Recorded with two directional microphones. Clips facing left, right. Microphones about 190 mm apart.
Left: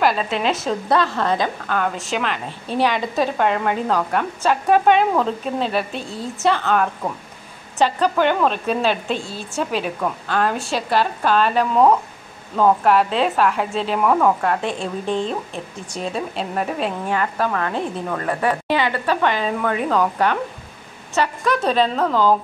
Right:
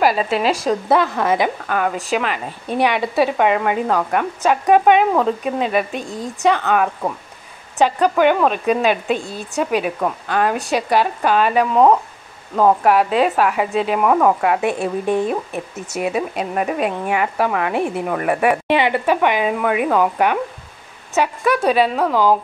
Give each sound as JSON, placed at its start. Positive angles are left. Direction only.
{"t": 0.0, "sound": "a woman's voice", "side_deg": -5}
{"t": 0.9, "sound": "a woman's voice", "side_deg": -15}
{"t": 1.8, "sound": "a woman's voice", "side_deg": 0}